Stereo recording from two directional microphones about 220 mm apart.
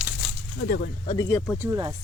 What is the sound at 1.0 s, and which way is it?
Speech, 20° left (ahead or behind).